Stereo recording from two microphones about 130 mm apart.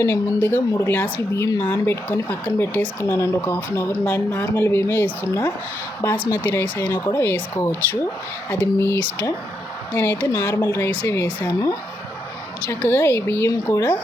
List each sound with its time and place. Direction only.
0.0 s speech: 15° left (ahead or behind)
12.6 s speech: 15° left (ahead or behind)